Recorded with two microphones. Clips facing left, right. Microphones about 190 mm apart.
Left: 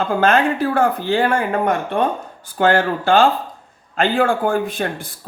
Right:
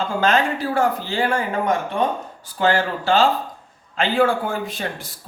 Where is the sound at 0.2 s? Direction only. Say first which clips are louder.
Left 3 dB; 55° left (ahead or behind).